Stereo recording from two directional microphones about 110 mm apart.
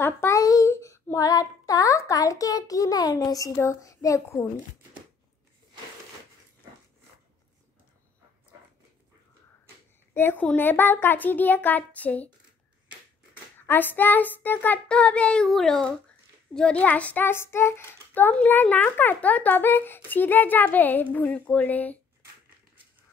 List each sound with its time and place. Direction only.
0.0 s child singing: 25° left (ahead or behind)
3.5 s a child's voice: 30° left (ahead or behind)
10.1 s a child's voice: 15° left (ahead or behind)
13.7 s a child's voice: 15° left (ahead or behind)